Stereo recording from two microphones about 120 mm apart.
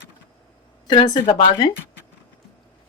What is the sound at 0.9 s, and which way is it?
Speech, 40° left (ahead or behind).